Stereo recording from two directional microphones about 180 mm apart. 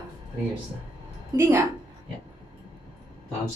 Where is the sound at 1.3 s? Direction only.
15° right (ahead or behind).